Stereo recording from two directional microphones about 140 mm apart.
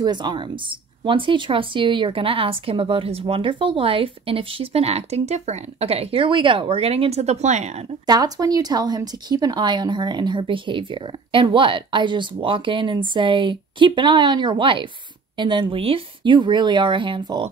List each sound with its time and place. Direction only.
0.0 s a woman's voice: 30° right (ahead or behind); by 7.8 s 55° right (ahead or behind)
8.1 s a woman's voice: 25° right (ahead or behind)